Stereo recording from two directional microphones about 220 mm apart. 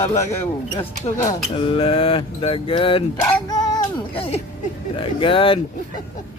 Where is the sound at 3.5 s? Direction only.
20° left (ahead or behind).